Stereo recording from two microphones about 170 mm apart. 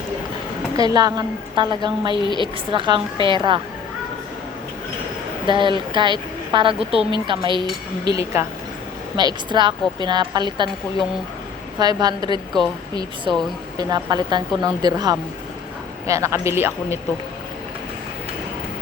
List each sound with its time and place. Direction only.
0.8 s a woman's voice: 20° right (ahead or behind)
5.5 s a woman's voice: 30° right (ahead or behind)
9.1 s a woman's voice: 25° right (ahead or behind)
11.8 s a woman's voice: 25° right (ahead or behind)